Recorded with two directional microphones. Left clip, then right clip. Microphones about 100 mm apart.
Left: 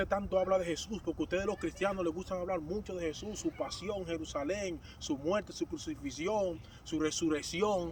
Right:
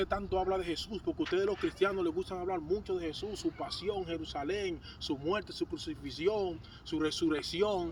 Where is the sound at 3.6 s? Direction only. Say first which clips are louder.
Right 1 dB; 45° left (ahead or behind).